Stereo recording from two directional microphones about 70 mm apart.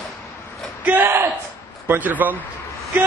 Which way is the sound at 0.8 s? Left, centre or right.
Right.